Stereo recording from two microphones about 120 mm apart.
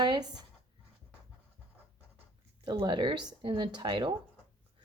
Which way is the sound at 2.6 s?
40° right (ahead or behind).